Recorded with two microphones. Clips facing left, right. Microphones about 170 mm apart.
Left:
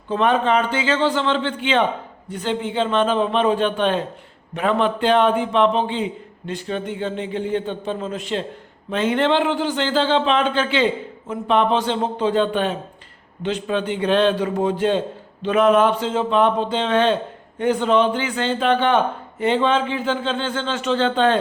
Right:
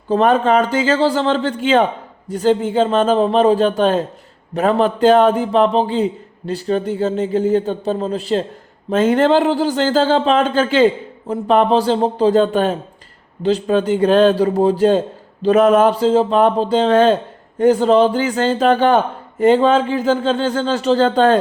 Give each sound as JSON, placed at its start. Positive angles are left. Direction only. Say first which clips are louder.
{"t": 0.1, "sound": "a man's voice", "louder": "right 5 dB", "side_deg": -40}